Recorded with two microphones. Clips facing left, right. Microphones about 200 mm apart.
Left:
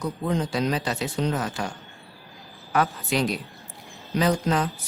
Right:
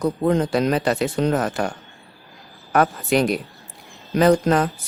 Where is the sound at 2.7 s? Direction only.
55° right (ahead or behind).